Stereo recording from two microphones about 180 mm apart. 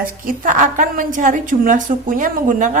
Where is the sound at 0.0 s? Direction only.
50° right (ahead or behind).